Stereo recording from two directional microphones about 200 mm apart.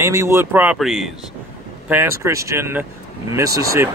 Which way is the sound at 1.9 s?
10° right (ahead or behind).